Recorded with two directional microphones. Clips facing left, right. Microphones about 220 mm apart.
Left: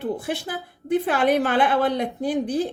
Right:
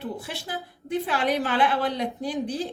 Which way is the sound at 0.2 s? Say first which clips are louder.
Left 6 dB; 50° left (ahead or behind).